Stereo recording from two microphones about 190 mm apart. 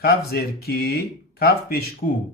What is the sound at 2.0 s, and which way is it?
Speech, 40° left (ahead or behind).